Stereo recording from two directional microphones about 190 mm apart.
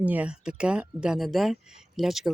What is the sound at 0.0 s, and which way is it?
Speech, 5° right (ahead or behind).